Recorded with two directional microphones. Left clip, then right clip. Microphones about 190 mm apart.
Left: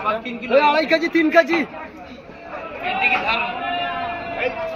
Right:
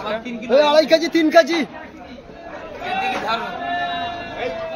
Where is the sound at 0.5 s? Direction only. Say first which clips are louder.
Right 2 dB; 85° right.